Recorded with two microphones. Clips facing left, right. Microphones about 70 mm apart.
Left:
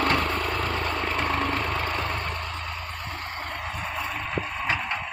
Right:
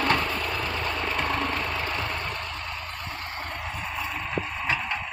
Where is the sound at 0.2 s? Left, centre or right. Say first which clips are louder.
Left 2 dB; left.